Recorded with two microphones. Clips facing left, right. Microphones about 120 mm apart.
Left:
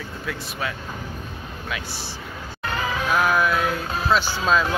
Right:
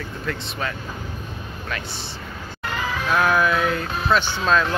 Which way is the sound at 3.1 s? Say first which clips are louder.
Right 2 dB; centre (ahead or behind).